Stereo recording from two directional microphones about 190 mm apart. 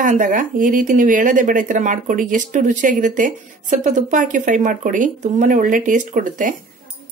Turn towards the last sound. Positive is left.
turn(degrees=-45)  # may be behind; listen again after turning